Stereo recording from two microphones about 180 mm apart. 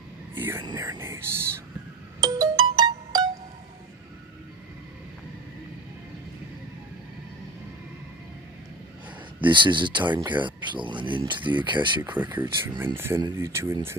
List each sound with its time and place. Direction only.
0.3 s whispering: 10° right (ahead or behind)
0.6 s speech: 20° right (ahead or behind)
2.2 s music: 20° right (ahead or behind)
9.4 s speech: 25° right (ahead or behind)
12.0 s speech: 10° right (ahead or behind)